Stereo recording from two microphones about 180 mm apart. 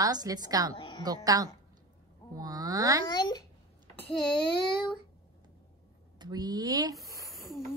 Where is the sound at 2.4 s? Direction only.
20° right (ahead or behind).